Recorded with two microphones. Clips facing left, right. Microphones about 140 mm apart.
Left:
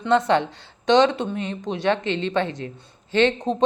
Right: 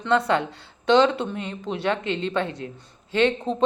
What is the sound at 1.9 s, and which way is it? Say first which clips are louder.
Speech: left 3 dB; 30° left (ahead or behind).